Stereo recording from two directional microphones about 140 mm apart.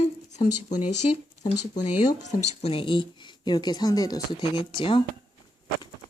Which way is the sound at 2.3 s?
50° left (ahead or behind).